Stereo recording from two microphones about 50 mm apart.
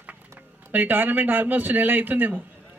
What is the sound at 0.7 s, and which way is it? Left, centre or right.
A man's voice, right.